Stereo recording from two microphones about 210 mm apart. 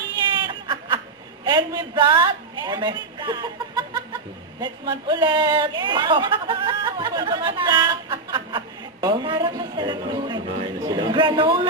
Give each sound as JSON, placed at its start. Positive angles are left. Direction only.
{"t": 0.3, "sound": "snicker", "side_deg": -20}
{"t": 1.5, "sound": "a man's voice", "side_deg": -20}